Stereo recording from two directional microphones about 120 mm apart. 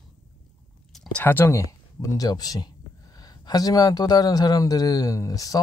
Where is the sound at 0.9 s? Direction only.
5° left (ahead or behind).